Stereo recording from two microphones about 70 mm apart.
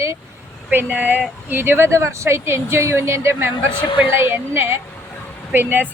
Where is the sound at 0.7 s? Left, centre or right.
Right.